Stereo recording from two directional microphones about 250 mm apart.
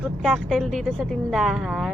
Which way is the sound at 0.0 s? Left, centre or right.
Centre.